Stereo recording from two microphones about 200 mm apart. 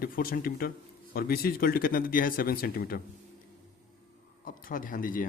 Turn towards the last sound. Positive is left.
turn(degrees=45)  # may be behind; listen again after turning